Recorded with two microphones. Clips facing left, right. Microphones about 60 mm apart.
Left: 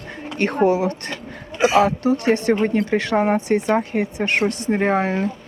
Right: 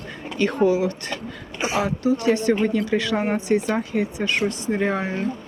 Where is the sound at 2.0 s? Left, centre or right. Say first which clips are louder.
Left 1 dB; left.